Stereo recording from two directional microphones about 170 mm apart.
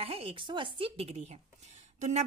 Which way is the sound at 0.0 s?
35° right (ahead or behind).